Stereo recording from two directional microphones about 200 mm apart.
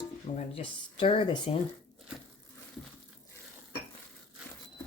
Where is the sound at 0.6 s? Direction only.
25° left (ahead or behind).